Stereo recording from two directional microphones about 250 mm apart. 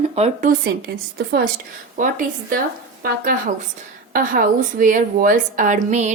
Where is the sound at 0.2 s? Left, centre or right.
Right.